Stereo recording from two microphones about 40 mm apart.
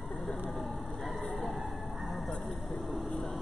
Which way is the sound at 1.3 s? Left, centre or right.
Centre.